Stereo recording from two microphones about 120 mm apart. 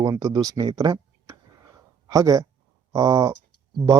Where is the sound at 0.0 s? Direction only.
30° right (ahead or behind).